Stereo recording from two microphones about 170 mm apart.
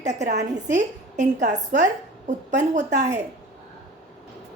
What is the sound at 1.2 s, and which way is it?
A woman's voice, 45° right (ahead or behind).